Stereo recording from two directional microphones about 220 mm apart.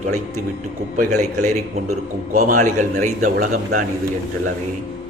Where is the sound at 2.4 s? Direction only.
35° right (ahead or behind).